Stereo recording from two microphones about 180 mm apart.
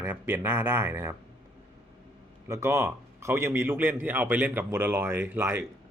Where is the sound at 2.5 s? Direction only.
15° right (ahead or behind).